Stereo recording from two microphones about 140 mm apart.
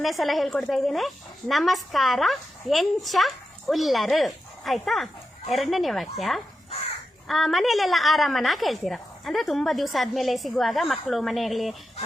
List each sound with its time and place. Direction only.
0.0 s a woman's voice: centre (ahead or behind)